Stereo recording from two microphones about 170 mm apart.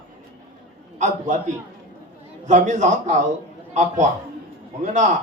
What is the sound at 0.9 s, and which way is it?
Speech, 45° right (ahead or behind).